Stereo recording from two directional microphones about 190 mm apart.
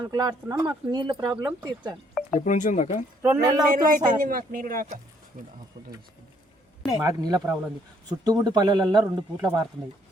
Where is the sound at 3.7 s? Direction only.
45° right (ahead or behind).